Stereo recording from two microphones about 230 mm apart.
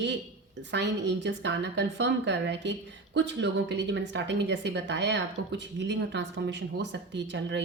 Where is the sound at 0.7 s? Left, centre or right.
Right.